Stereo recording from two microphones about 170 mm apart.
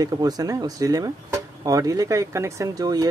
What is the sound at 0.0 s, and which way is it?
Speech, 20° right (ahead or behind).